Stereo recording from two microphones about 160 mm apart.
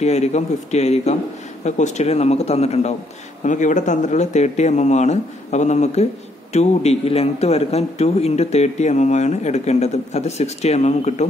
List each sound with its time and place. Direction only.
0.0 s a man's voice: 45° left (ahead or behind)